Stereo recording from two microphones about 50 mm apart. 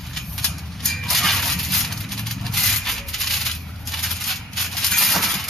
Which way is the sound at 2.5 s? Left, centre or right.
Centre.